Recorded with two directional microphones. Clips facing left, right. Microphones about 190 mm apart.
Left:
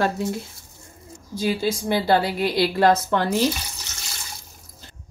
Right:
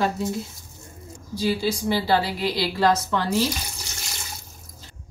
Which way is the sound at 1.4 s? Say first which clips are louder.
Left 1 dB; 55° left (ahead or behind).